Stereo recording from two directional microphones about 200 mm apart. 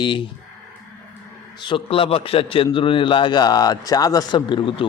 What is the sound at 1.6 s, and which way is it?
Speech, 25° left (ahead or behind).